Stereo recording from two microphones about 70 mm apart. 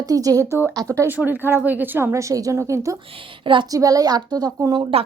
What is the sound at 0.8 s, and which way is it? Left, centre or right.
Speech, right.